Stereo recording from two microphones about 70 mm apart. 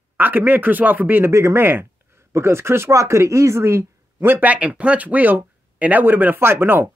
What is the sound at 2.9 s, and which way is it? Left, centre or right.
Speech, right.